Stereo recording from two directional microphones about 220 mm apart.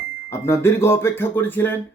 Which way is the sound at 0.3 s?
10° left (ahead or behind).